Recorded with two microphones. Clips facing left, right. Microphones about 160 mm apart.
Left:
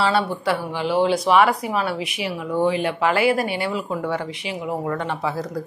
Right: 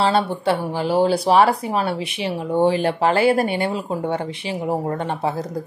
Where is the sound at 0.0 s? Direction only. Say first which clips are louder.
Right 2 dB; 25° right (ahead or behind).